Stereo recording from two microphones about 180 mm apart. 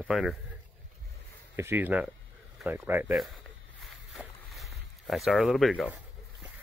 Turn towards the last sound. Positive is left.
turn(degrees=0)  # may be behind; listen again after turning